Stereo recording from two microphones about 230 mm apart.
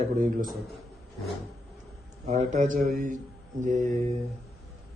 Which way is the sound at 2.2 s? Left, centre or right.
Right.